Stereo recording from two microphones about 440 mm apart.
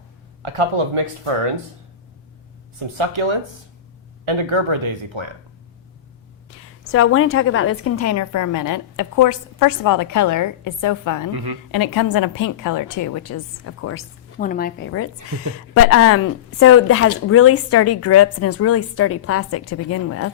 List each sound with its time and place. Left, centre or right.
2.7 s speech: right
6.8 s a woman's voice: left
11.3 s a woman's voice: right
11.7 s a woman's voice: left
14.3 s a woman's voice: centre; by 20.3 s left